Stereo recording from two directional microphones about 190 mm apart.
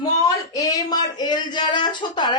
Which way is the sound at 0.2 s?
15° left (ahead or behind).